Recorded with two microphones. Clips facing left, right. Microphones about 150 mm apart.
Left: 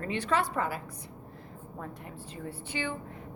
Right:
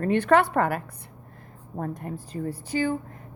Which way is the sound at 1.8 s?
45° right (ahead or behind).